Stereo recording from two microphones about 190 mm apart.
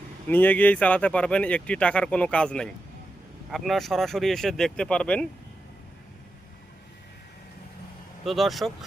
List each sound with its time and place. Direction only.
0.3 s speech: 10° left (ahead or behind)
8.2 s speech: centre (ahead or behind)